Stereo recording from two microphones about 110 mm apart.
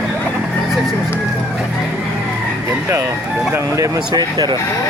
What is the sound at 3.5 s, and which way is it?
Speech, 30° right (ahead or behind).